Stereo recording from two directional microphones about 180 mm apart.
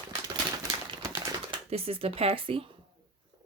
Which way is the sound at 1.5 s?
35° right (ahead or behind).